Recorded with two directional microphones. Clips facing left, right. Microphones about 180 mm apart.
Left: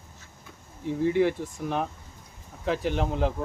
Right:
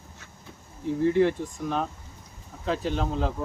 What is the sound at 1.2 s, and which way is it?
Speech, 15° left (ahead or behind).